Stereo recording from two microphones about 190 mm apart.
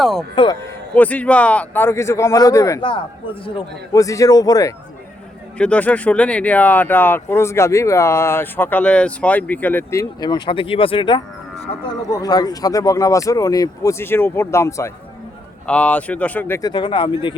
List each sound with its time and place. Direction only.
0.0 s a man's voice: centre (ahead or behind); by 4.7 s 20° left (ahead or behind)
5.5 s speech: 5° left (ahead or behind); by 17.3 s 25° left (ahead or behind)